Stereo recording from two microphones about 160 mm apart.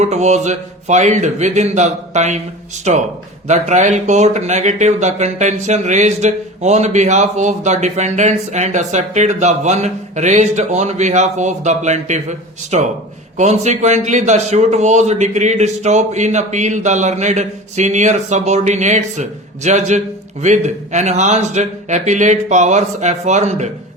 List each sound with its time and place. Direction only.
0.0 s speech: 45° right (ahead or behind)